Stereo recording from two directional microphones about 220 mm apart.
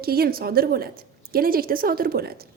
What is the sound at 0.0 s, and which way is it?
A woman's voice, 45° right (ahead or behind).